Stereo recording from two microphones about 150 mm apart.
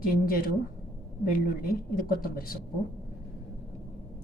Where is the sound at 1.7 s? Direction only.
75° left (ahead or behind).